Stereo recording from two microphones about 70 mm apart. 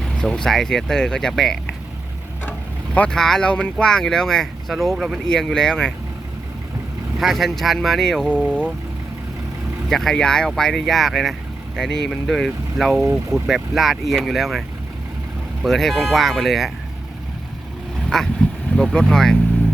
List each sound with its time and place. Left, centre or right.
0.0 s speech: centre
2.5 s vehicle: left
3.1 s speech: centre
5.2 s speech: centre
7.2 s speech: centre
8.3 s speech: centre
9.9 s speech: centre
15.6 s speech: centre
18.1 s speech: centre